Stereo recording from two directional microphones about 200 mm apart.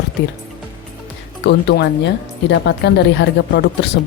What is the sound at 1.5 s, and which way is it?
Speech, 55° left (ahead or behind).